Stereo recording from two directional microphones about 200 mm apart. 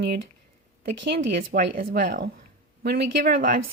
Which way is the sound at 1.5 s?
45° right (ahead or behind).